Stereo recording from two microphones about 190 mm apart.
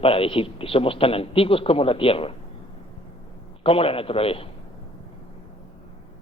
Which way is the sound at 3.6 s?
30° left (ahead or behind).